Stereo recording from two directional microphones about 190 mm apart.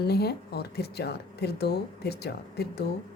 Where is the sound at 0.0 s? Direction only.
55° left (ahead or behind).